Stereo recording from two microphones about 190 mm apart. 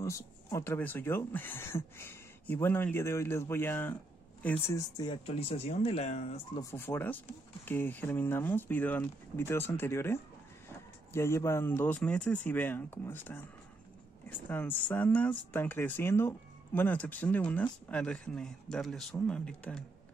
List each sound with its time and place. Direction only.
0.0 s speech: 15° left (ahead or behind); by 6.4 s 35° left (ahead or behind)
6.5 s speech: 15° left (ahead or behind)
14.5 s speech: 10° left (ahead or behind)